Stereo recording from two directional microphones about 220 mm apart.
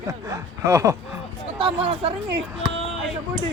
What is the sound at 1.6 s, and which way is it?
Speech, 25° right (ahead or behind).